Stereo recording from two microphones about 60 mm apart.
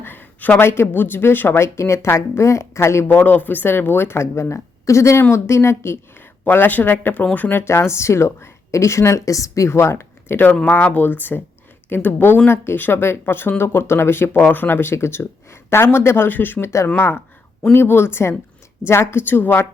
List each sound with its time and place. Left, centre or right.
0.0 s a sound: left
0.6 s a woman's voice: left
3.1 s a woman's voice: left
6.4 s speech: left
7.5 s a woman's voice: left
10.7 s speech: left
14.4 s speech: left
16.6 s a woman's voice: left